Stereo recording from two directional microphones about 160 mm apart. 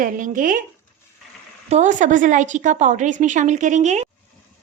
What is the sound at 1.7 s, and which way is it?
A woman's voice, 50° right (ahead or behind).